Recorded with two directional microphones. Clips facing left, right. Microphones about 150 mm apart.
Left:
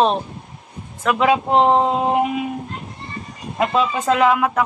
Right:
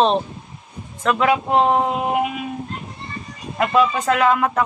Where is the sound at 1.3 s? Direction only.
20° left (ahead or behind).